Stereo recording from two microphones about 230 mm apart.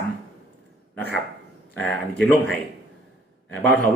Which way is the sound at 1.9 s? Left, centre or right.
Centre.